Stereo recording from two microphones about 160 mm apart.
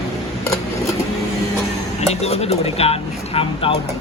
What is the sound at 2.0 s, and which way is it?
Speech, 40° left (ahead or behind).